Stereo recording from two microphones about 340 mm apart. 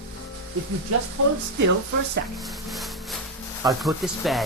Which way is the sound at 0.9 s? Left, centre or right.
Right.